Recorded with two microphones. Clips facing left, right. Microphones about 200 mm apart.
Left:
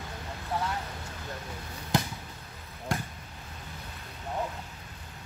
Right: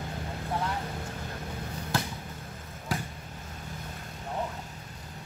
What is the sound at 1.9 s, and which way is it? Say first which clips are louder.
Basketball bounce: left 3 dB; 20° left (ahead or behind).